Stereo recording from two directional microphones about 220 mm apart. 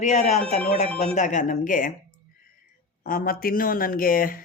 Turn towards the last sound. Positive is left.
turn(degrees=40)  # may be behind; listen again after turning